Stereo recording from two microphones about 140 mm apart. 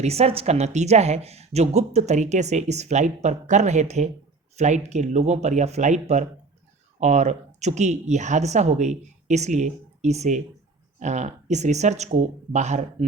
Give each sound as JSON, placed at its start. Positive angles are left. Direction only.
{"t": 0.0, "sound": "speech", "side_deg": -45}